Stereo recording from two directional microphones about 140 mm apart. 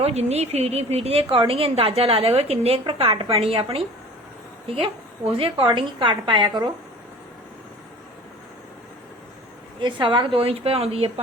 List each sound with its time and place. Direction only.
0.0 s a woman's voice: 50° right (ahead or behind); by 6.7 s 35° right (ahead or behind)
9.8 s a woman's voice: 35° right (ahead or behind)